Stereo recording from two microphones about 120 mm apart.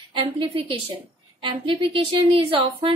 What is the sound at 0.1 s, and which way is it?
Speech, 50° right (ahead or behind).